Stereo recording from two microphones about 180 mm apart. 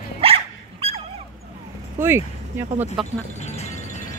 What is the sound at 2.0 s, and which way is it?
Speech, 15° right (ahead or behind).